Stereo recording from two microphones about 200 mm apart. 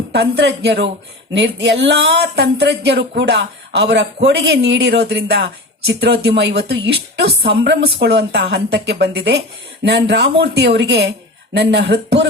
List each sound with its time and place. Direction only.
0.1 s speech: 55° right (ahead or behind)